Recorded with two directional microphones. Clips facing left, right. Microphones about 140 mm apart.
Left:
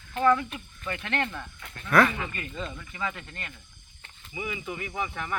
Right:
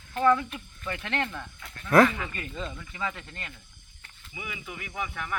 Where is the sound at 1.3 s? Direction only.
5° left (ahead or behind).